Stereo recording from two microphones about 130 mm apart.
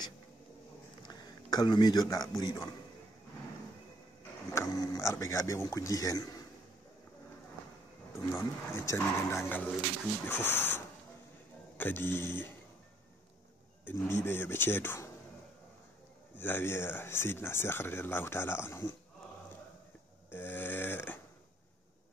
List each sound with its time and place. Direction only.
1.0 s a man's voice: 30° left (ahead or behind)
4.5 s speech: 30° left (ahead or behind)
8.3 s speech: 20° left (ahead or behind)
13.8 s speech: 20° left (ahead or behind)
16.3 s speech: 15° left (ahead or behind)
20.2 s snoring: 15° left (ahead or behind)